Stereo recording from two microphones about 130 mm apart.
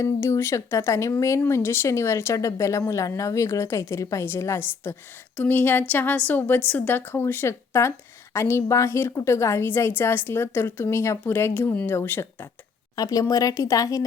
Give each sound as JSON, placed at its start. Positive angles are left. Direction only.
{"t": 0.0, "sound": "a woman's voice", "side_deg": 20}
{"t": 13.0, "sound": "a woman's voice", "side_deg": 30}